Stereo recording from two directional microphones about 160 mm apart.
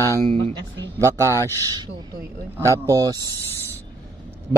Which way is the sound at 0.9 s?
15° right (ahead or behind).